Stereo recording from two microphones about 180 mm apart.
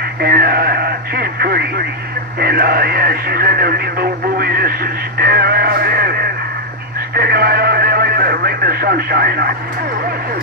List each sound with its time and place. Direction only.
0.2 s speech: 55° right (ahead or behind)